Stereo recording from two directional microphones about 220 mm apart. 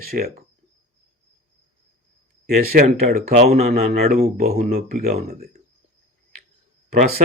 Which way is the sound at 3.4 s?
30° right (ahead or behind).